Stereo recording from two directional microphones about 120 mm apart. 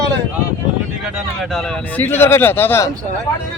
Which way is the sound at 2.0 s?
20° left (ahead or behind).